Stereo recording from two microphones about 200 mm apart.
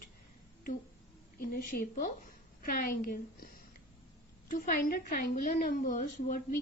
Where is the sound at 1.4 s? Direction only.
45° left (ahead or behind).